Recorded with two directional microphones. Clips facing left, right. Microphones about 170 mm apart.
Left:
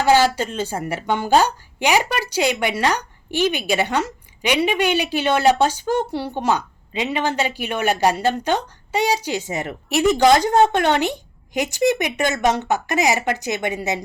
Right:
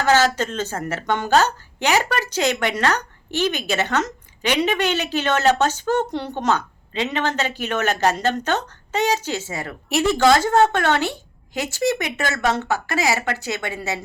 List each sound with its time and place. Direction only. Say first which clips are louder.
0.0 s a woman's voice: left 2 dB; 10° left (ahead or behind)